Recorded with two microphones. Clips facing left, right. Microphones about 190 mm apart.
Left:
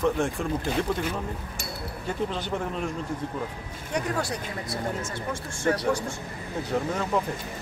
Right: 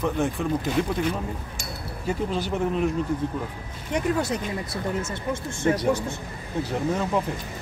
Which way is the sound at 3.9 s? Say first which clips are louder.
Right 4 dB; 20° right (ahead or behind).